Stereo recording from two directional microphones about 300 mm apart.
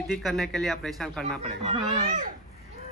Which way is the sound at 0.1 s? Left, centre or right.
Centre.